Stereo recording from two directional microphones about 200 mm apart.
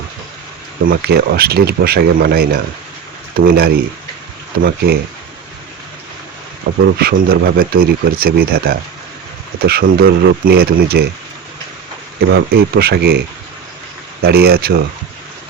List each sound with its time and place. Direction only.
0.9 s speech: 50° right (ahead or behind)
6.8 s speech: 50° right (ahead or behind)
12.3 s speech: 50° right (ahead or behind)